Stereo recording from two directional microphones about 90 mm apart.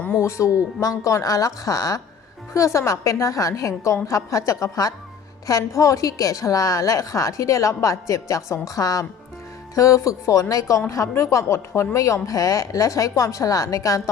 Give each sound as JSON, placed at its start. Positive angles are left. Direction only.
{"t": 0.2, "sound": "a woman's voice", "side_deg": 35}